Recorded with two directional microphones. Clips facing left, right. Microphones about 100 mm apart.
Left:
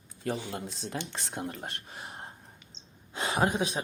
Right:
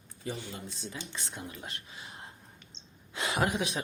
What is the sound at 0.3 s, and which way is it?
A man's voice, 85° left.